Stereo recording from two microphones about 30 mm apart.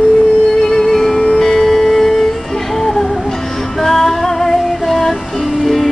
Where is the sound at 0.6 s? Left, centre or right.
Centre.